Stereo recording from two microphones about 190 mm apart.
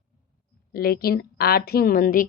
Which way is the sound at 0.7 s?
50° left (ahead or behind).